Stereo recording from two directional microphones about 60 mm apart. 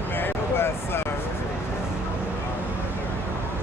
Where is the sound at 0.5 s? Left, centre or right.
Left.